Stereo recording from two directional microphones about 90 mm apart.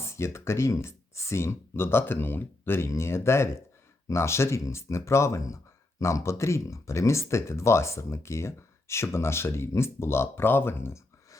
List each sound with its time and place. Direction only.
0.0 s speech: 30° left (ahead or behind)